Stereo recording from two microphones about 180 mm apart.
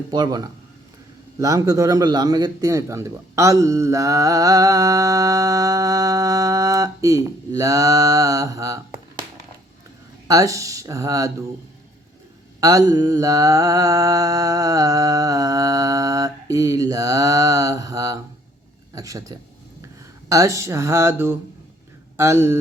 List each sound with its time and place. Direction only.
0.1 s a man's voice: 20° right (ahead or behind)
10.2 s speech: 20° right (ahead or behind)
12.5 s a man's voice: 20° right (ahead or behind)